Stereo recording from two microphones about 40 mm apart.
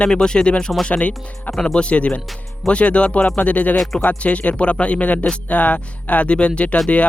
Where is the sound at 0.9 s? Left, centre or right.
Left.